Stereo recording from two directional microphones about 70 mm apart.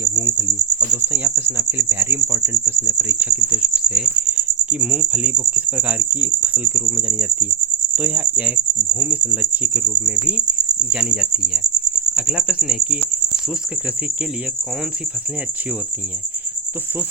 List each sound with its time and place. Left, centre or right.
0.0 s cricket: right
1.0 s speech: right; by 13.0 s centre